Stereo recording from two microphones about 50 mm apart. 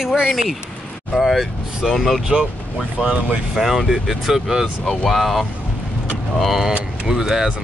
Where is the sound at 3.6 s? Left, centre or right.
Centre.